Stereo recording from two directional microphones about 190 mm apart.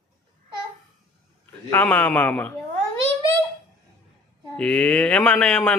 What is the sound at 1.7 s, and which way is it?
Speech, 10° left (ahead or behind).